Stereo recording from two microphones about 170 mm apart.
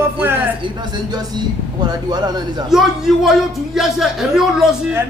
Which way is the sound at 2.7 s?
Centre (ahead or behind).